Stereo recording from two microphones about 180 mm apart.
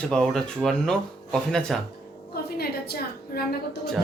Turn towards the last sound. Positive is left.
turn(degrees=60)  # may be behind; listen again after turning